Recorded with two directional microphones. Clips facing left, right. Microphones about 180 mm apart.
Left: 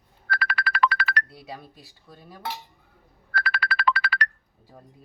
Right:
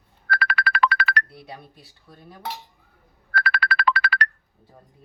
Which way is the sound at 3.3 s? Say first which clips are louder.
Right 3 dB; 60° right (ahead or behind).